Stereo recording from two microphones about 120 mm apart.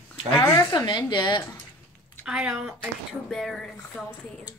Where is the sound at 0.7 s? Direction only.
40° left (ahead or behind).